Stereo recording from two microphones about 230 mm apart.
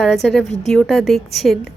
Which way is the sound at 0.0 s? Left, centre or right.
Centre.